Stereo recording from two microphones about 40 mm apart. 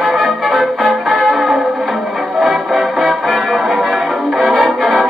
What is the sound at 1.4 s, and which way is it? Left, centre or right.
Music, right.